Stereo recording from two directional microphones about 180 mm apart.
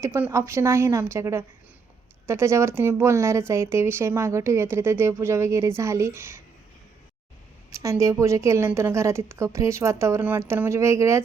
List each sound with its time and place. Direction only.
0.0 s speech: 15° right (ahead or behind)
7.7 s speech: 15° right (ahead or behind)